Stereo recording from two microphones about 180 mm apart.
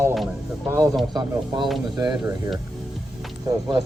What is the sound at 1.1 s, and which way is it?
Speech, 25° right (ahead or behind).